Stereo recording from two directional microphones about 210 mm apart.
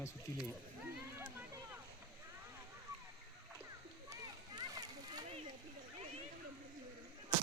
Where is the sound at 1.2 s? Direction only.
10° right (ahead or behind).